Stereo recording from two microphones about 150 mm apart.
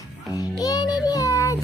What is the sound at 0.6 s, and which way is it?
Child singing, 25° left (ahead or behind).